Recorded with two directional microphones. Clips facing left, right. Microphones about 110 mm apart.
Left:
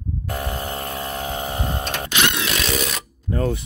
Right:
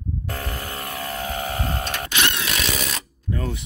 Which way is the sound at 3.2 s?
40° left (ahead or behind).